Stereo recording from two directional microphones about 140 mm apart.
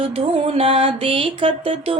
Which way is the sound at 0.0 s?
40° right (ahead or behind).